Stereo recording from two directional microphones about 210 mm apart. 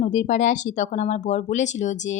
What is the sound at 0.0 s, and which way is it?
Speech, 35° left (ahead or behind).